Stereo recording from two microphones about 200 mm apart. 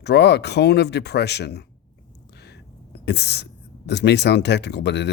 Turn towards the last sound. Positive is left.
turn(degrees=60)  # may be behind; listen again after turning